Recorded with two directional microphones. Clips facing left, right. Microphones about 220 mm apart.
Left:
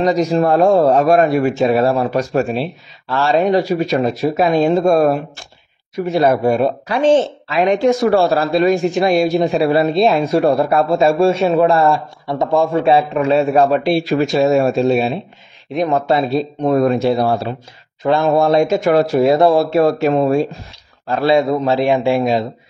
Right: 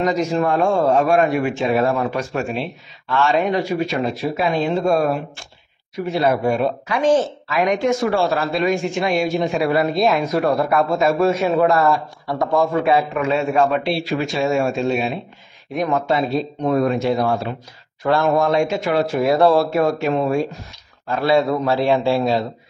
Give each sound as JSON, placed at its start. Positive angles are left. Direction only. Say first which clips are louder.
{"t": 0.0, "sound": "speech", "louder": "left 4 dB", "side_deg": 35}
{"t": 15.7, "sound": "speech", "louder": "left 4 dB", "side_deg": 25}
{"t": 16.1, "sound": "speech", "louder": "left 4 dB", "side_deg": 35}
{"t": 18.0, "sound": "speech", "louder": "left 3 dB", "side_deg": 20}
{"t": 18.3, "sound": "speech", "louder": "left 4 dB", "side_deg": 35}
{"t": 19.2, "sound": "a man's voice", "louder": "even", "side_deg": 20}
{"t": 19.7, "sound": "speech", "louder": "left 5 dB", "side_deg": 35}
{"t": 21.3, "sound": "a man's voice", "louder": "left 3 dB", "side_deg": 20}